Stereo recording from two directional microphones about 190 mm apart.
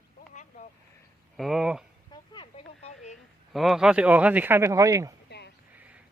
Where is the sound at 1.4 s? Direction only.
Centre (ahead or behind).